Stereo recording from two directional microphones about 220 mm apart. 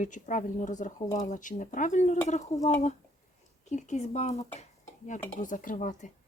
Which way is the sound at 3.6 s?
30° left (ahead or behind).